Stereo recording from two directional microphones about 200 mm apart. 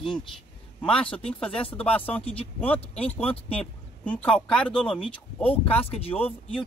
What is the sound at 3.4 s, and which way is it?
Speech, 30° left (ahead or behind).